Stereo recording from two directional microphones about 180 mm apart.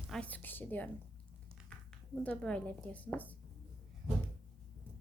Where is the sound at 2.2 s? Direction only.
5° left (ahead or behind).